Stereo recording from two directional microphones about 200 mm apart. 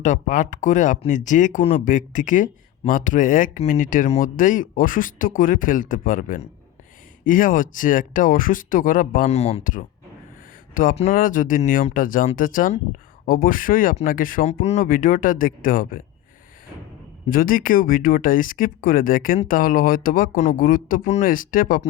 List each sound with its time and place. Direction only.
0.0 s speech: 40° left (ahead or behind)
17.2 s speech: 45° left (ahead or behind)